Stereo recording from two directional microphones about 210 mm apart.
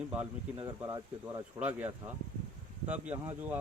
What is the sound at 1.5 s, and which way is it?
Speech, 5° right (ahead or behind).